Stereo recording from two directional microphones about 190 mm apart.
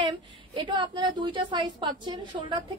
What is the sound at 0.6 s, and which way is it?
A woman's voice, 25° right (ahead or behind).